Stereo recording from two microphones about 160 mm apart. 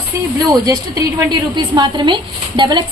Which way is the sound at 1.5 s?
30° right (ahead or behind).